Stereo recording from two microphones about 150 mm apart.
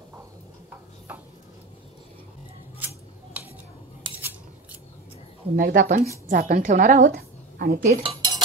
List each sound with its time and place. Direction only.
3.4 s scissors: 10° right (ahead or behind)
4.1 s scissors: 35° right (ahead or behind)
5.6 s speech: 70° right (ahead or behind)
6.2 s a woman's voice: 55° right (ahead or behind); by 8.0 s 75° right (ahead or behind)
8.0 s cutlery: 35° right (ahead or behind)